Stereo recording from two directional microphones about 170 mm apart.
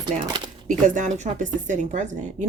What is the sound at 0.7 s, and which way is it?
Speech, 50° right (ahead or behind).